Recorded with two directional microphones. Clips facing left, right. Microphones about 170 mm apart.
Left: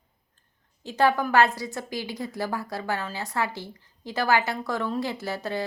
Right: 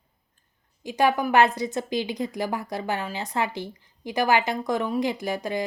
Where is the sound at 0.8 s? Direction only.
15° right (ahead or behind).